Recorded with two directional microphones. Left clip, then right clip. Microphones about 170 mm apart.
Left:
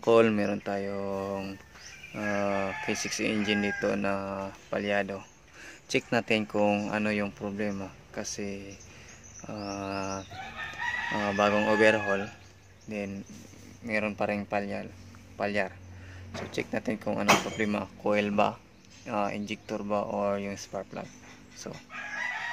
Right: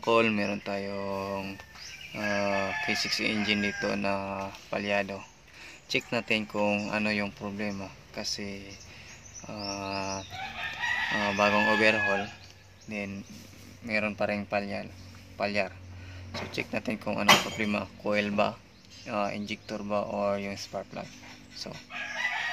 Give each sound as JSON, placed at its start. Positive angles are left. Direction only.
{"t": 0.0, "sound": "speech", "side_deg": 10}
{"t": 5.9, "sound": "speech", "side_deg": 15}